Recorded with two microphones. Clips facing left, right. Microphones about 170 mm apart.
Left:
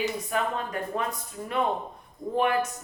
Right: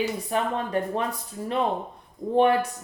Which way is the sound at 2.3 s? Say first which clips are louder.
Right 5 dB; 30° right (ahead or behind).